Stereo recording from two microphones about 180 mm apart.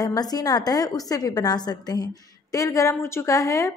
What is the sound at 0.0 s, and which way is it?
A woman's voice, 20° left (ahead or behind).